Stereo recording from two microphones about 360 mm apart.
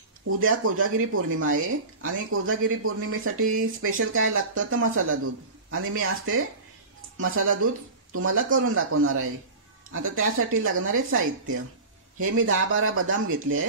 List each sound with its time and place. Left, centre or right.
0.4 s speech: right